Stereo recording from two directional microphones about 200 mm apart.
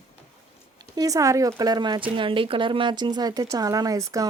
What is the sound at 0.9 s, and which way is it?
Speech, 20° right (ahead or behind).